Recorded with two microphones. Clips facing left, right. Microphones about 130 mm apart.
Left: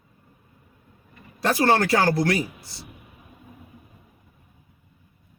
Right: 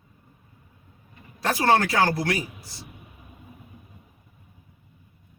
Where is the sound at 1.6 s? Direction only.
35° left (ahead or behind).